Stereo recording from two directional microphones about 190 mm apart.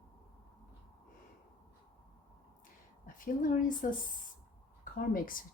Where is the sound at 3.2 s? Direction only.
45° left (ahead or behind).